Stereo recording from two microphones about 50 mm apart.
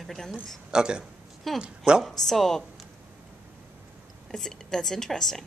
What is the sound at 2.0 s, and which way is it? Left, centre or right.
Speech, centre.